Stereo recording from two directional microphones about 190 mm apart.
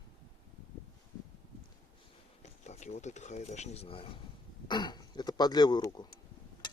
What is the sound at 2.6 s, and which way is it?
Speech, 35° left (ahead or behind).